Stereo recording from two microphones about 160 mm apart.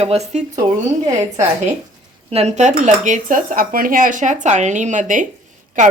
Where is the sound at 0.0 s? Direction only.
40° right (ahead or behind).